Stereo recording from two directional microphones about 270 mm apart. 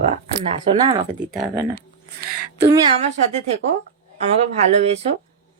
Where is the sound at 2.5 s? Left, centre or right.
Right.